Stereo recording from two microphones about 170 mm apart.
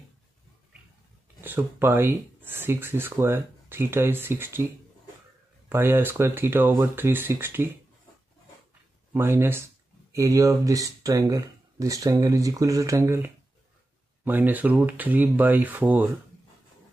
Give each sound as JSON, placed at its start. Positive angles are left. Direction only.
{"t": 1.4, "sound": "speech", "side_deg": -10}
{"t": 5.7, "sound": "speech", "side_deg": -15}
{"t": 9.1, "sound": "speech", "side_deg": -15}